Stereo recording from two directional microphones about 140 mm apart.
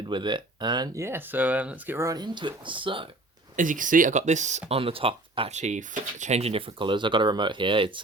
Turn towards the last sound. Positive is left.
turn(degrees=-35)  # may be behind; listen again after turning